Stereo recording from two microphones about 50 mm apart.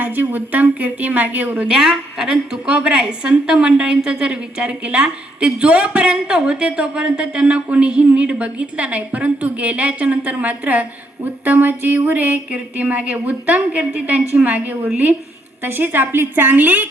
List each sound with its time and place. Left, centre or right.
0.0 s speech: right
1.7 s a woman's voice: centre
2.6 s speech: right